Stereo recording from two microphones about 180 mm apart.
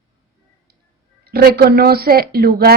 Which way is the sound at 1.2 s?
60° right (ahead or behind).